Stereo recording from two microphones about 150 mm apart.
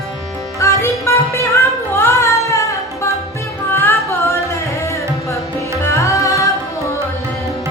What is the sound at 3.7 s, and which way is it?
Carnatic music, 15° left (ahead or behind).